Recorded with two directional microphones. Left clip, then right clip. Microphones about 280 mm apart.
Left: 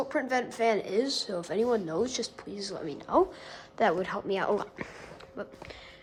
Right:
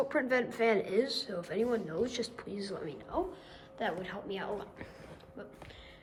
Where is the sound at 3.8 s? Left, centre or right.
Centre.